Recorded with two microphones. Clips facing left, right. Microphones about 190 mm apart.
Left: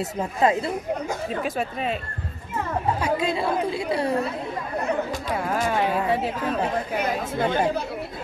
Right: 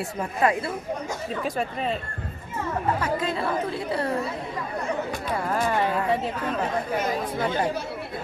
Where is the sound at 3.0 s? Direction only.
15° left (ahead or behind).